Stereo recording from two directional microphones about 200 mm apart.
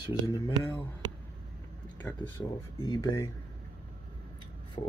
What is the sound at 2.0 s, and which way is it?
Speech, 15° left (ahead or behind).